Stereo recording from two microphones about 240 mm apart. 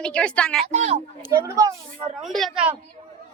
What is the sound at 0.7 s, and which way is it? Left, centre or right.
Speech, right.